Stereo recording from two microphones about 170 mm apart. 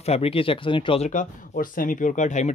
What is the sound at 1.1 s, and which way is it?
Speech, 50° left (ahead or behind).